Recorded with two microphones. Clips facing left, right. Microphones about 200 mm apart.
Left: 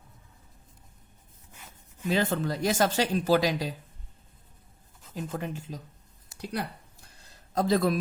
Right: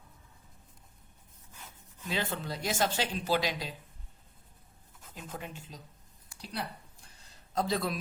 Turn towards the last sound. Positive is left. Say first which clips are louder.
# left 7 dB
turn(degrees=45)  # may be behind; listen again after turning